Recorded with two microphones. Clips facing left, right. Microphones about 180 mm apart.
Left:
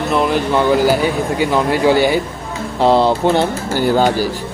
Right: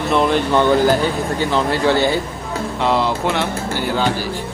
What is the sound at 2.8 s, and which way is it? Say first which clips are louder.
Speech: left 6 dB; 30° left (ahead or behind).